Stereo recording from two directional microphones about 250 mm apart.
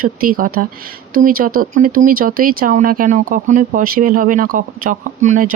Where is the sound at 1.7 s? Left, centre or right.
Right.